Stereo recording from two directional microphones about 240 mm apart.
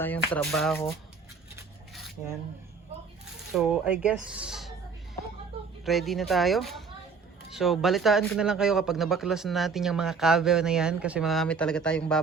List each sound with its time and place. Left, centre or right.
0.0 s speech: centre
3.5 s speech: centre
5.8 s speech: centre